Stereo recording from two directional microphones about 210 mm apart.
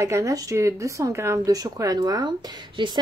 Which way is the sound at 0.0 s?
15° right (ahead or behind).